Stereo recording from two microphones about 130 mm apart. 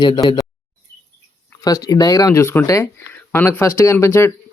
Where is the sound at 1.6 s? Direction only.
25° left (ahead or behind).